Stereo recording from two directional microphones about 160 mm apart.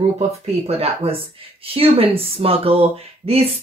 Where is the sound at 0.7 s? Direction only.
35° right (ahead or behind).